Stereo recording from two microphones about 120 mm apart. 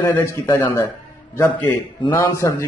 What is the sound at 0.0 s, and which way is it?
A man's voice, 20° left (ahead or behind).